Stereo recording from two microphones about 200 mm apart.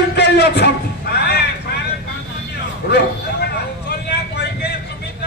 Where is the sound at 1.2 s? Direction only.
55° left (ahead or behind).